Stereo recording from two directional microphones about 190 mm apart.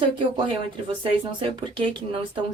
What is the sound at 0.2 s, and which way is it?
A woman's voice, 25° right (ahead or behind).